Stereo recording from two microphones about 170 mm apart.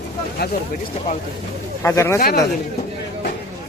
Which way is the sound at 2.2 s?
65° left (ahead or behind).